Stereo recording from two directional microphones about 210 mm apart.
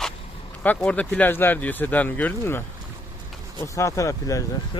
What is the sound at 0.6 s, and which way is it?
Speech, 5° left (ahead or behind).